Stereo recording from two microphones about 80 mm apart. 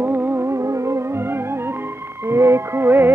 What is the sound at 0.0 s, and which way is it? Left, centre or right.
Music, right.